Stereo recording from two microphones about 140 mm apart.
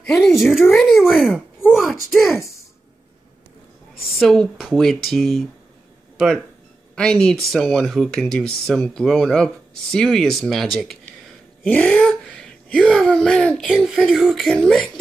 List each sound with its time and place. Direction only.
0.4 s speech: centre (ahead or behind)
4.2 s speech: centre (ahead or behind)